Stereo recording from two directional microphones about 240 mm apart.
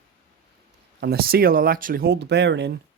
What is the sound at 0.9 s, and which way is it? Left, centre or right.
Speech, right.